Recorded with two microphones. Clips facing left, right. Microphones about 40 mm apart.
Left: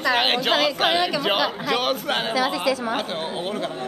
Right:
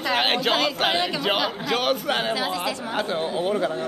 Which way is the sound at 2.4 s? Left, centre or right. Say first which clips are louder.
Left 4 dB; left.